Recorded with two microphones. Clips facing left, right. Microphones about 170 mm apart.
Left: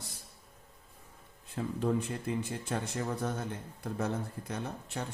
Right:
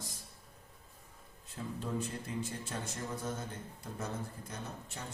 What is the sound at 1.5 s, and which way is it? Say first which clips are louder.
Speech: left 7 dB; 60° left (ahead or behind).